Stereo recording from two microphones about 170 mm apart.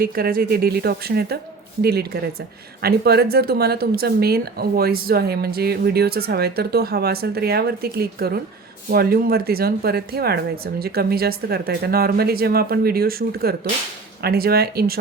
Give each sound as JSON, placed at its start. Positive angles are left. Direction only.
{"t": 0.0, "sound": "speech", "side_deg": -60}